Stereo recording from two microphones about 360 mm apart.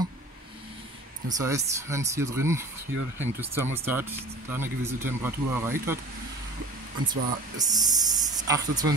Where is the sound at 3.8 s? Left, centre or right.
Centre.